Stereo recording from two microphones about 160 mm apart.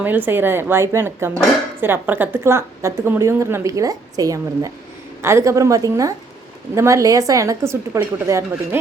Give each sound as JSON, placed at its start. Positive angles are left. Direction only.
{"t": 0.3, "sound": "a woman's voice", "side_deg": -15}